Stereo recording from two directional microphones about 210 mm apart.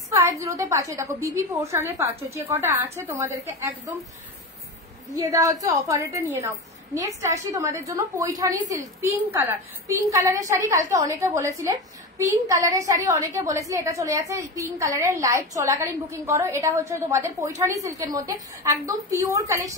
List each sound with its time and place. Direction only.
0.1 s a woman's voice: 15° right (ahead or behind)
5.1 s a woman's voice: 15° right (ahead or behind)
18.6 s a woman's voice: 15° right (ahead or behind)